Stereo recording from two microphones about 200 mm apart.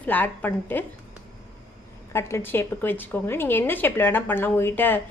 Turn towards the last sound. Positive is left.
turn(degrees=10)  # may be behind; listen again after turning